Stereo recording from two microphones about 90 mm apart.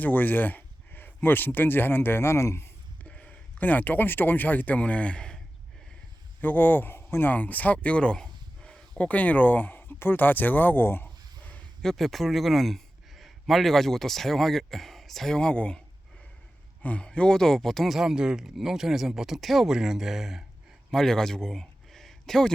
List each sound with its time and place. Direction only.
0.0 s speech: 20° left (ahead or behind)
3.0 s speech: 15° left (ahead or behind)
6.4 s speech: 20° left (ahead or behind)
11.8 s a man's voice: 5° left (ahead or behind)
16.8 s a man's voice: 15° left (ahead or behind)